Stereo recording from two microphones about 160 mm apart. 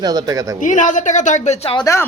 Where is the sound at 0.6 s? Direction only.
50° left (ahead or behind).